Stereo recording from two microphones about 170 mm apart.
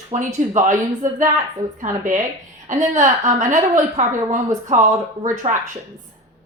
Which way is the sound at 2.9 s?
45° right (ahead or behind).